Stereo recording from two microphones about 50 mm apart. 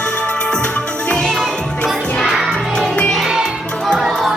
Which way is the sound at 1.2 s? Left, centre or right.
Centre.